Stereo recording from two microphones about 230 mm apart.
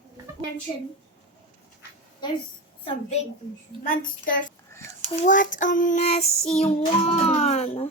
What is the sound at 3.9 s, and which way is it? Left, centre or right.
Child singing, left.